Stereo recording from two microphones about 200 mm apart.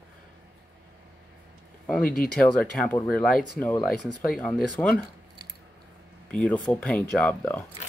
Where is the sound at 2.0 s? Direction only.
45° left (ahead or behind).